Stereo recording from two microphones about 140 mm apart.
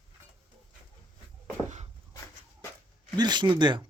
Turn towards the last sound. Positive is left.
turn(degrees=-35)  # may be behind; listen again after turning